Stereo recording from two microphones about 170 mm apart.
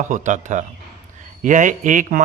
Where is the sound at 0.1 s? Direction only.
45° right (ahead or behind).